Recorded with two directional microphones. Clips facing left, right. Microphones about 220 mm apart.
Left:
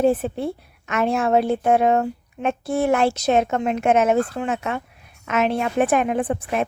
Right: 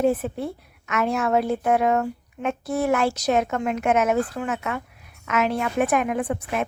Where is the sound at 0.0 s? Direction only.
30° left (ahead or behind).